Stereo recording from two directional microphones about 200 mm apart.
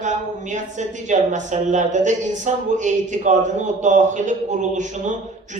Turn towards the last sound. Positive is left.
turn(degrees=-40)  # may be behind; listen again after turning